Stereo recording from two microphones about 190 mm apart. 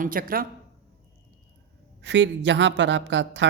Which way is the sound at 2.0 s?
70° right (ahead or behind).